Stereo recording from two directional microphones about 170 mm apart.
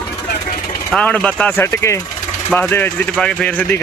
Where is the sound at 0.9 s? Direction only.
10° left (ahead or behind).